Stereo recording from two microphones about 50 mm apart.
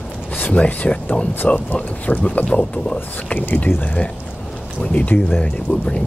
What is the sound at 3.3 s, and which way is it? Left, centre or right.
Speech, left.